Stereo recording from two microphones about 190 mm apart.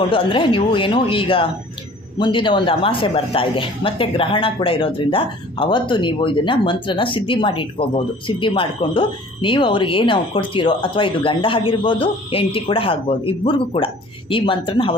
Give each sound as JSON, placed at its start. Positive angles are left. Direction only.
{"t": 0.1, "sound": "speech", "side_deg": 25}